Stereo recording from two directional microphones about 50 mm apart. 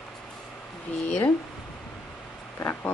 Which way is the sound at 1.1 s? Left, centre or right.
Left.